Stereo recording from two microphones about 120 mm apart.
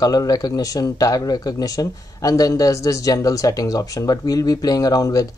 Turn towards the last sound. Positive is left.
turn(degrees=30)  # may be behind; listen again after turning